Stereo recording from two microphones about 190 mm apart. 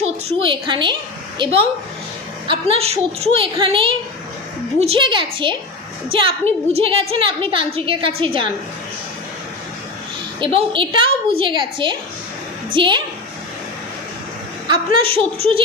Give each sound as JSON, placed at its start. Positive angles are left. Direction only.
{"t": 0.3, "sound": "a woman's voice", "side_deg": -25}
{"t": 10.4, "sound": "a woman's voice", "side_deg": -25}
{"t": 14.7, "sound": "a woman's voice", "side_deg": -30}